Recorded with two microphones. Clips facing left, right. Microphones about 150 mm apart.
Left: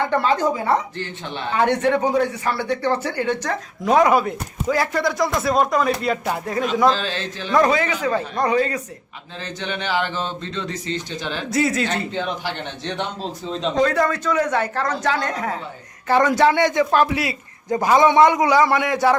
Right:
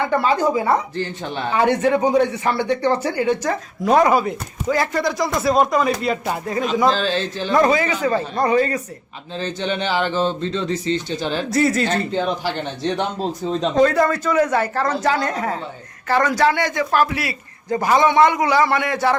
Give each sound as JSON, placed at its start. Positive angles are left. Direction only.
{"t": 0.0, "sound": "a woman's voice", "side_deg": -10}
{"t": 0.9, "sound": "a man's voice", "side_deg": -40}
{"t": 1.5, "sound": "speech", "side_deg": -10}
{"t": 6.9, "sound": "speech", "side_deg": -30}
{"t": 7.5, "sound": "speech", "side_deg": -5}
{"t": 9.4, "sound": "speech", "side_deg": -30}
{"t": 11.4, "sound": "speech", "side_deg": 0}
{"t": 11.9, "sound": "a man's voice", "side_deg": -40}
{"t": 13.7, "sound": "speech", "side_deg": -5}
{"t": 16.0, "sound": "a man's voice", "side_deg": 20}